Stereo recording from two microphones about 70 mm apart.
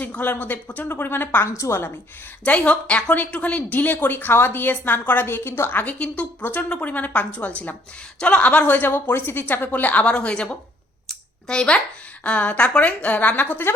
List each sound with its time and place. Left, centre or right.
0.0 s speech: left
1.5 s a woman's voice: left
2.4 s speech: centre
5.8 s a child's voice: centre